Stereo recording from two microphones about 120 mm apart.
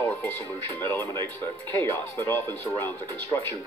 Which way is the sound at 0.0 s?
15° left (ahead or behind).